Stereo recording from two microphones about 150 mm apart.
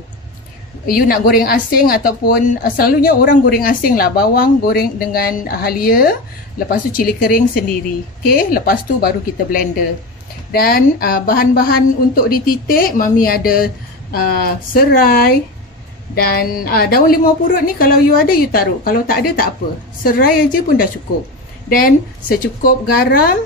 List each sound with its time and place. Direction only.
0.8 s a woman's voice: 75° left (ahead or behind)
10.5 s a woman's voice: 85° left